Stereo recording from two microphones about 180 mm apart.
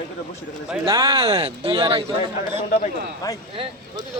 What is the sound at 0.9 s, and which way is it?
Speech, 20° right (ahead or behind).